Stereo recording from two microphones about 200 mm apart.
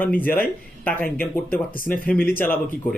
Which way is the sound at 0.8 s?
10° left (ahead or behind).